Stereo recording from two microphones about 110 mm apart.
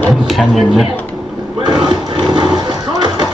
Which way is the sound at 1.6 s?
45° right (ahead or behind).